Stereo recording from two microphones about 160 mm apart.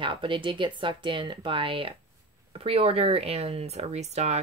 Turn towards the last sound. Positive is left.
turn(degrees=-45)  # may be behind; listen again after turning